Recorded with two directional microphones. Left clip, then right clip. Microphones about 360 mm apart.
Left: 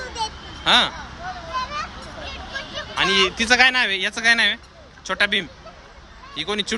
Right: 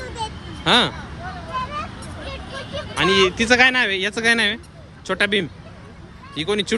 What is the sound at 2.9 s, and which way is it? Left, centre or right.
Speech, centre.